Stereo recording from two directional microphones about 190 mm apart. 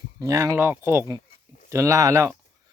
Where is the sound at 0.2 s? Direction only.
15° right (ahead or behind).